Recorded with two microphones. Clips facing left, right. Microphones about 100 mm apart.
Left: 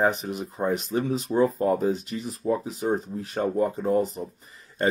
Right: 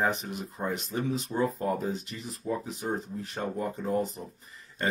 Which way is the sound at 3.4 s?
5° left (ahead or behind).